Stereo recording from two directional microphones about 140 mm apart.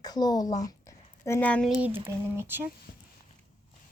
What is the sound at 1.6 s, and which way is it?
Speech, 10° right (ahead or behind).